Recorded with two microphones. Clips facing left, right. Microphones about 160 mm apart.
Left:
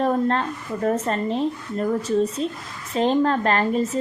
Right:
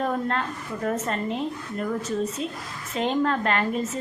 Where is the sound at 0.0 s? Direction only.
35° left (ahead or behind).